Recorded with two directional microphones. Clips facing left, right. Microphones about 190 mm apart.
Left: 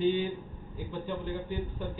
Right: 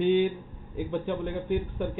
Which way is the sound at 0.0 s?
65° right (ahead or behind).